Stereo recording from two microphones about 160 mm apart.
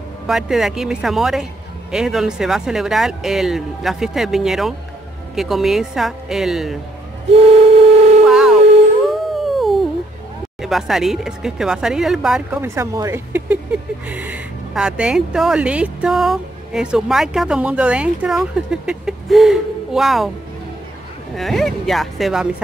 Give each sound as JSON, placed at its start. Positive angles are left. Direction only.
{"t": 0.3, "sound": "speech", "side_deg": -5}
{"t": 7.2, "sound": "a sound", "side_deg": -40}
{"t": 8.3, "sound": "howl", "side_deg": -5}
{"t": 10.6, "sound": "speech", "side_deg": 0}
{"t": 12.6, "sound": "speech", "side_deg": -15}
{"t": 21.4, "sound": "speech", "side_deg": 0}